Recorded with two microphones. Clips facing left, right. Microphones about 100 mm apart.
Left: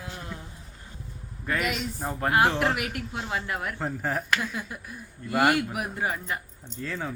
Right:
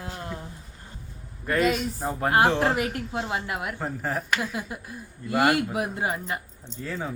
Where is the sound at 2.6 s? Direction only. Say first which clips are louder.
Right 3 dB; 30° right (ahead or behind).